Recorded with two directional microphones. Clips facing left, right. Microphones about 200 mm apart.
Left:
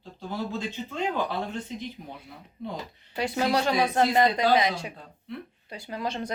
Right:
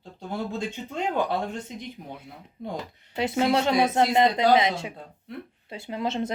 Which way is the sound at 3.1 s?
25° right (ahead or behind).